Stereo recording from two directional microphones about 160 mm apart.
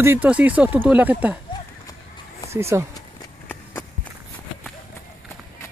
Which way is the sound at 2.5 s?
15° right (ahead or behind).